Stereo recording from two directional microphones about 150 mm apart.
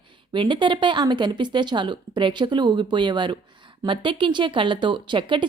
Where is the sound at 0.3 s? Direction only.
30° right (ahead or behind).